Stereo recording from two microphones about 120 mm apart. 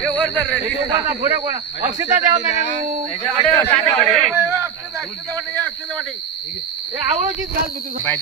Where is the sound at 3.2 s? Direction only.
20° left (ahead or behind).